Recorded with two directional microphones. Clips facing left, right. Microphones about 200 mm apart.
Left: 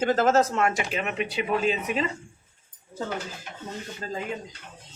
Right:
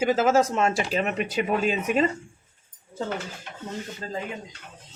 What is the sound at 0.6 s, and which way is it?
Speech, 30° right (ahead or behind).